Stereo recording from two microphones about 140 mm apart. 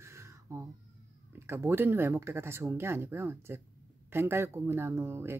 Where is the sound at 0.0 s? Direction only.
20° right (ahead or behind).